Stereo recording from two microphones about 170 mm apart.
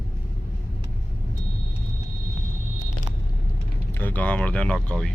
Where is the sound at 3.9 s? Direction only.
10° left (ahead or behind).